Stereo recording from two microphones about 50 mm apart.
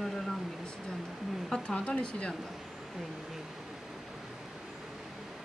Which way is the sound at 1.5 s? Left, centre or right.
Centre.